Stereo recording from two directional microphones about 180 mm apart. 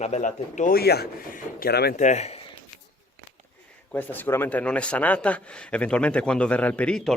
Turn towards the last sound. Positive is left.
turn(degrees=5)  # may be behind; listen again after turning